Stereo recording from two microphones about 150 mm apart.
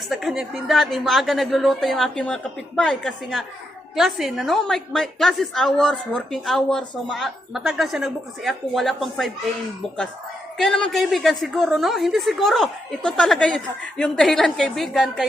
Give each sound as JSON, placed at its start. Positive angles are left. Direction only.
{"t": 0.1, "sound": "a woman's voice", "side_deg": 0}
{"t": 10.6, "sound": "a woman's voice", "side_deg": 5}